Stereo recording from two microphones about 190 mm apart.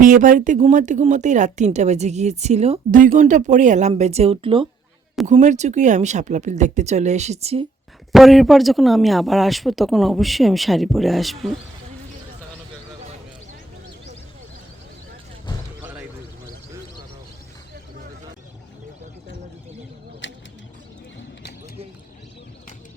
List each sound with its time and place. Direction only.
0.0 s speech: 45° right (ahead or behind); by 4.7 s 25° right (ahead or behind)
5.2 s speech: 40° right (ahead or behind)
8.1 s speech: centre (ahead or behind)
15.8 s basketball bounce: 10° right (ahead or behind)
20.2 s a sound: 75° left (ahead or behind)